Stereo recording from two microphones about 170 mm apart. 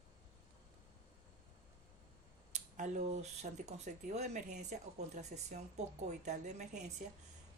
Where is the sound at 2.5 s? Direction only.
45° right (ahead or behind).